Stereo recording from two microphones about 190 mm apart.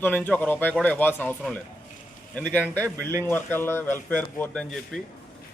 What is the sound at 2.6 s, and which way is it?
Speech, 10° right (ahead or behind).